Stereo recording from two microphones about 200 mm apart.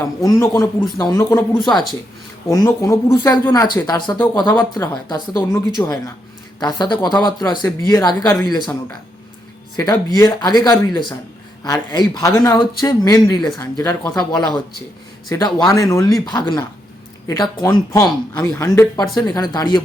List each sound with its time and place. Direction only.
0.3 s speech: 15° left (ahead or behind)
2.5 s speech: 15° left (ahead or behind)
9.7 s speech: 20° left (ahead or behind)